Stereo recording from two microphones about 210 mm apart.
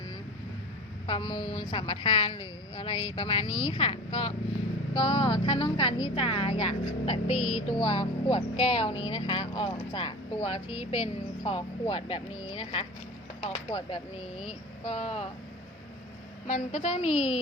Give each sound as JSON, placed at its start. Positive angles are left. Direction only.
{"t": 1.0, "sound": "a woman's voice", "side_deg": 25}
{"t": 14.4, "sound": "a woman's voice", "side_deg": 30}
{"t": 16.5, "sound": "a woman's voice", "side_deg": 35}